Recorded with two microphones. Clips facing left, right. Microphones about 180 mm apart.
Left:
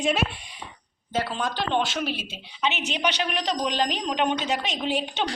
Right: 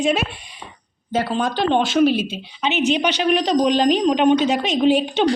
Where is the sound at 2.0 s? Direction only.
20° right (ahead or behind).